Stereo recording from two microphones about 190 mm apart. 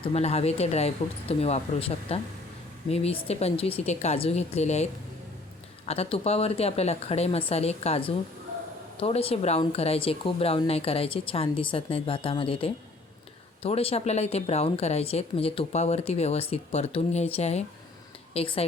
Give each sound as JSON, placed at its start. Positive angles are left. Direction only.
{"t": 0.0, "sound": "a woman's voice", "side_deg": 35}